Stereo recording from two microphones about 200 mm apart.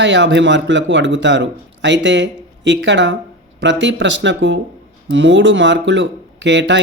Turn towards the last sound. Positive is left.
turn(degrees=-65)  # may be behind; listen again after turning